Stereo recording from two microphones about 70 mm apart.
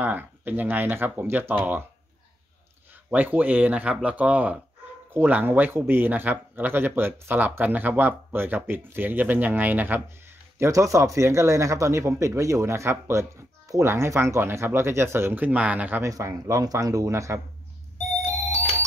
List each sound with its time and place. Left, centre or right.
0.0 s speech: right
3.1 s speech: right
10.7 s speech: right
15.4 s speech: centre
16.0 s speech: right